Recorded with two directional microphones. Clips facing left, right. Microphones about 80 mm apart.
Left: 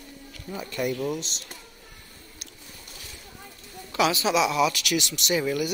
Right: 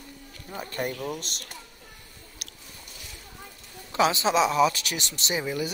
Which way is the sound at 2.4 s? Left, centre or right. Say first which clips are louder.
Even; right.